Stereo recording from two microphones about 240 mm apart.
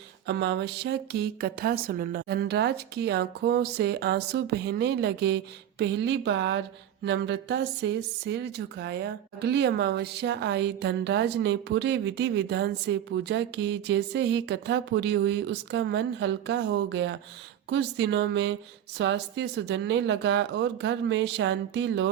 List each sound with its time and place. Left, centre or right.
0.3 s speech: right